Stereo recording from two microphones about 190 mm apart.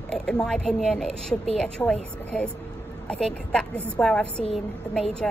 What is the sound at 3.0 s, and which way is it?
Speech, 5° left (ahead or behind).